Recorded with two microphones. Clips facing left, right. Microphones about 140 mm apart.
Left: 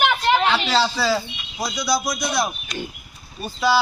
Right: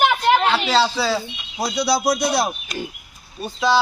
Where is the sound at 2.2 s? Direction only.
35° right (ahead or behind).